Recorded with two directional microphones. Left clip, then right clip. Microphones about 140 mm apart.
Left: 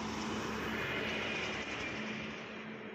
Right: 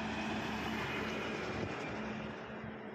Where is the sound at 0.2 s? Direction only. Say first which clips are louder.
Even; 55° right (ahead or behind).